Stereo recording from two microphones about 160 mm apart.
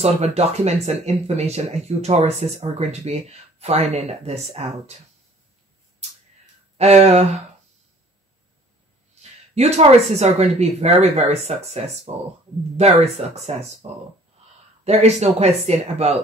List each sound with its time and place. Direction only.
0.0 s speech: 40° right (ahead or behind)
6.8 s speech: 45° right (ahead or behind)
9.6 s speech: 40° right (ahead or behind)
14.9 s speech: 40° right (ahead or behind)